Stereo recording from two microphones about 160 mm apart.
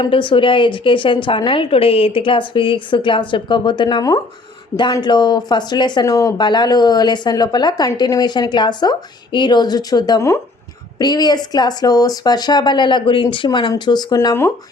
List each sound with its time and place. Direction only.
0.0 s a woman's voice: 30° left (ahead or behind)